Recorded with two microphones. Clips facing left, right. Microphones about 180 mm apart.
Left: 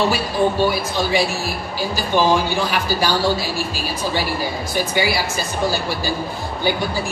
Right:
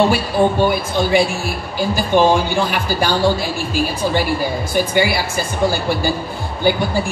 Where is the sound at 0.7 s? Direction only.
55° right (ahead or behind).